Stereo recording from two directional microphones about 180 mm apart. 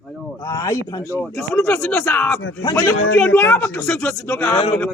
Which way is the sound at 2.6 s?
15° left (ahead or behind).